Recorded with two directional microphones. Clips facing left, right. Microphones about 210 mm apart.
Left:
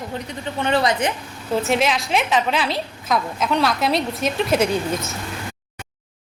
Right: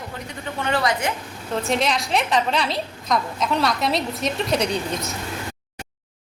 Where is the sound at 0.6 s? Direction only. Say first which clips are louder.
Left 3 dB; 20° left (ahead or behind).